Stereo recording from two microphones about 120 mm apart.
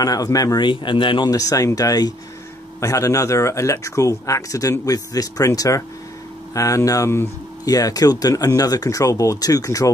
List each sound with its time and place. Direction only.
0.0 s speech: 30° left (ahead or behind)
1.3 s speech: 30° left (ahead or behind)